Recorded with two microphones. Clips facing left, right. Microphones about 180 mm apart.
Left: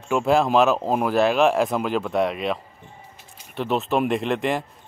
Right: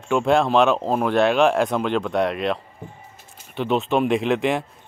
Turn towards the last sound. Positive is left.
turn(degrees=0)  # may be behind; listen again after turning